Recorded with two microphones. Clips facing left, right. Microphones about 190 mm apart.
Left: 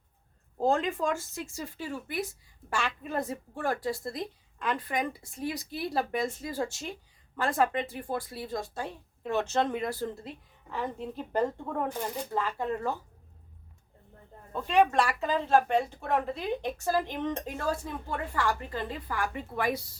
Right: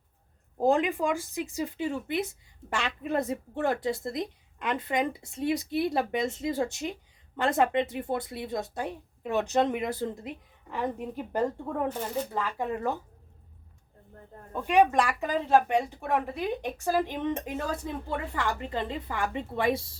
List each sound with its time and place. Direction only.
0.6 s speech: 15° right (ahead or behind)
14.5 s speech: 15° right (ahead or behind)